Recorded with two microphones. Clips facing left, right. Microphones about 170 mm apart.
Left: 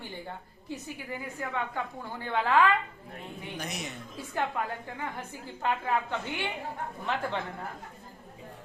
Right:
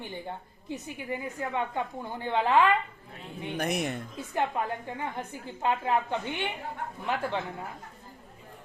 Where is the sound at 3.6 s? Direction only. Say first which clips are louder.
Right 10 dB; 55° right (ahead or behind).